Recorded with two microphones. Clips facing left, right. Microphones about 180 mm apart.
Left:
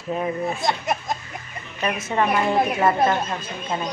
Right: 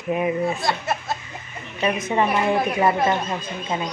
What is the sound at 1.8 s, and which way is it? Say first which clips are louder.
Speech: right 2 dB; 15° right (ahead or behind).